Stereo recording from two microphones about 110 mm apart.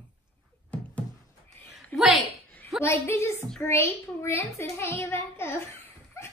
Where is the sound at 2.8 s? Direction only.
25° left (ahead or behind).